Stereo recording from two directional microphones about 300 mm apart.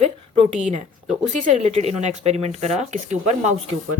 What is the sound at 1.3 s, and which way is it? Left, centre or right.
Speech, right.